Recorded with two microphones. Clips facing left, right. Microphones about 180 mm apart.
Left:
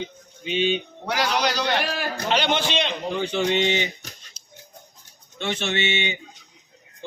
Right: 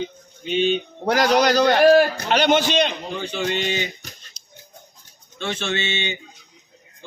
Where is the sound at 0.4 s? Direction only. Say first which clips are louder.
Right 3 dB; 45° right (ahead or behind).